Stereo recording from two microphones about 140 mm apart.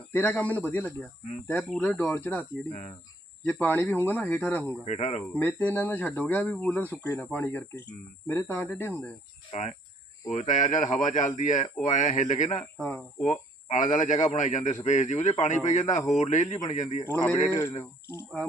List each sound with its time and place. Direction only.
0.1 s speech: 15° left (ahead or behind)
4.9 s speech: 55° left (ahead or behind)
5.3 s speech: 15° left (ahead or behind)
9.5 s speech: 55° left (ahead or behind)
10.2 s speech: 65° left (ahead or behind)
12.7 s speech: 10° left (ahead or behind)
13.2 s speech: 60° left (ahead or behind)